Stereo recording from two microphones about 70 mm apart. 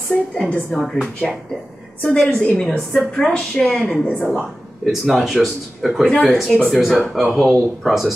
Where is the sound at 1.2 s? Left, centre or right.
Centre.